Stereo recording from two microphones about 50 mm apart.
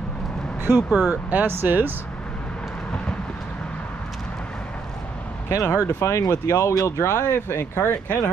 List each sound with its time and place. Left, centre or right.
0.7 s speech: centre
1.1 s speech: right
5.5 s speech: left